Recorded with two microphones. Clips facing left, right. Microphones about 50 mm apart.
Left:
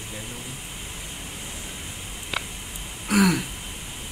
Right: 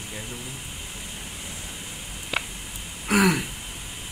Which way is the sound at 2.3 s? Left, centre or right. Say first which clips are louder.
Right 2 dB; centre.